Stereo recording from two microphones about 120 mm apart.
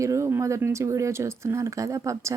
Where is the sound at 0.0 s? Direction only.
25° right (ahead or behind).